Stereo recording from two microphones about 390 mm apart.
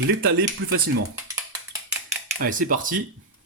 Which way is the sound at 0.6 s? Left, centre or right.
Right.